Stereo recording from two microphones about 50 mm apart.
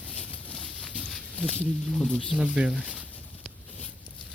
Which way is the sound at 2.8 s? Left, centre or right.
Right.